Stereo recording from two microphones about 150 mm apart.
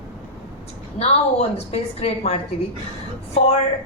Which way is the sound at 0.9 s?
45° left (ahead or behind).